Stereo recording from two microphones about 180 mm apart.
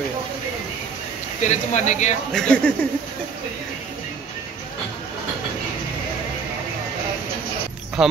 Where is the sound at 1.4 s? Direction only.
40° left (ahead or behind).